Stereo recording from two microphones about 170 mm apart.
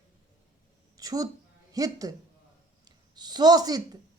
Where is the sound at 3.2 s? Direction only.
25° right (ahead or behind).